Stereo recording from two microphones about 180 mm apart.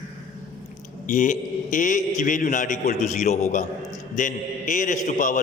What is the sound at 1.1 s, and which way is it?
A man's voice, 45° left (ahead or behind).